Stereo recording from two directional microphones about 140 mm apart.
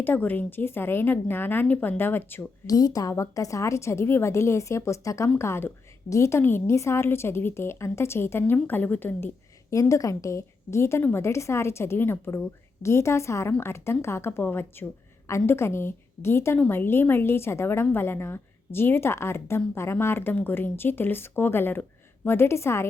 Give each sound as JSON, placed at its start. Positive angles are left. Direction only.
{"t": 0.0, "sound": "a woman's voice", "side_deg": 15}
{"t": 2.6, "sound": "a woman's voice", "side_deg": 25}